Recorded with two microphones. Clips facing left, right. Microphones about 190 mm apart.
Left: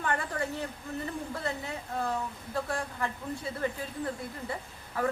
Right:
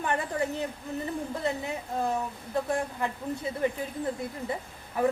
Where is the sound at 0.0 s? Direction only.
20° right (ahead or behind).